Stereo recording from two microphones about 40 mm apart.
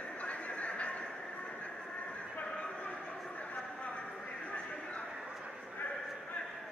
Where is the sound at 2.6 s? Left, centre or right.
Left.